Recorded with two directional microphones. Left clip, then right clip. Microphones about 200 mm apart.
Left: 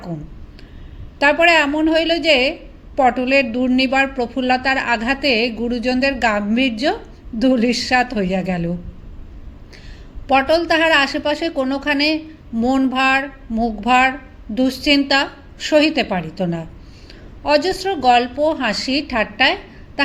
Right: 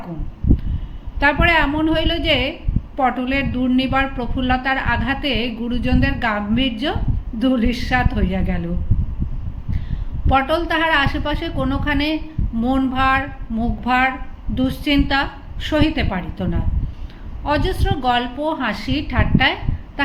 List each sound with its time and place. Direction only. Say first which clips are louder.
1.2 s a woman's voice: left 3 dB; 35° left (ahead or behind)
10.2 s a woman's voice: left 3 dB; 35° left (ahead or behind)